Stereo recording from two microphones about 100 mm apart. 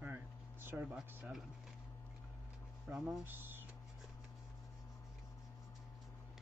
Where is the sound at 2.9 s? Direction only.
20° right (ahead or behind).